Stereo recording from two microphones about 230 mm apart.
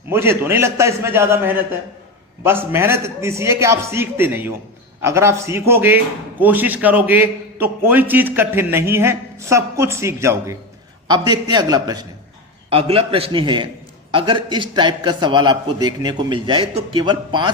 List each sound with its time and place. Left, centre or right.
0.1 s a man's voice: centre